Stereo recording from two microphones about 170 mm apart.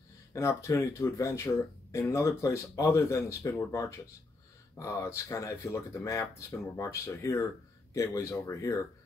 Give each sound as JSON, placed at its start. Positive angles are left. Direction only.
{"t": 0.3, "sound": "speech", "side_deg": 15}